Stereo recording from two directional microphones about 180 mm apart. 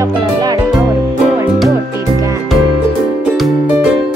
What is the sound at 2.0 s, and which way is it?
Music, 20° right (ahead or behind).